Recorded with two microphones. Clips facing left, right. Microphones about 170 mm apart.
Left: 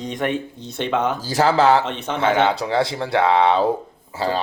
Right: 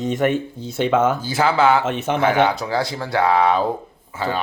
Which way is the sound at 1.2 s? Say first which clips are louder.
Left 1 dB; 35° left (ahead or behind).